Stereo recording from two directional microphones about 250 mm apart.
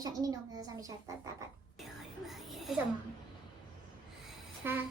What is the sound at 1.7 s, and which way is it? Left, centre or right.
Whispering, centre.